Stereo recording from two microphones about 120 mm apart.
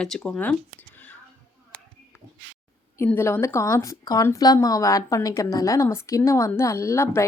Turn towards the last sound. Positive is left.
turn(degrees=20)  # may be behind; listen again after turning